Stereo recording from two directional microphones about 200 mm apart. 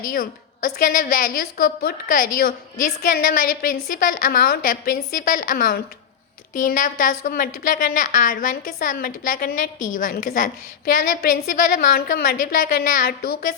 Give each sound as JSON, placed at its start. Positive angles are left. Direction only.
{"t": 0.1, "sound": "a woman's voice", "side_deg": 45}